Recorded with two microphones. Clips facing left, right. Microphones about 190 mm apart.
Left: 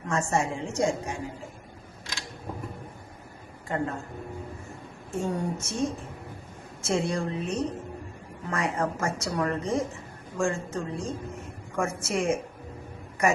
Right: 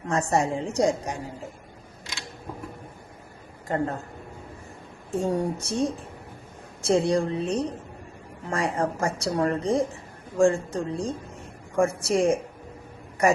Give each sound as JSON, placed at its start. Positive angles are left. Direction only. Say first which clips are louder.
{"t": 0.0, "sound": "speech", "louder": "right 3 dB", "side_deg": -35}
{"t": 3.7, "sound": "speech", "louder": "right 3 dB", "side_deg": -40}
{"t": 5.1, "sound": "speech", "louder": "right 4 dB", "side_deg": -35}